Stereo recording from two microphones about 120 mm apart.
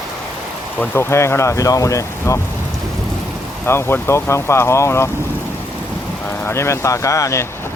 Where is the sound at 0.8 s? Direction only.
20° left (ahead or behind).